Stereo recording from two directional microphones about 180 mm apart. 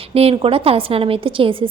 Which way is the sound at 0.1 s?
35° right (ahead or behind).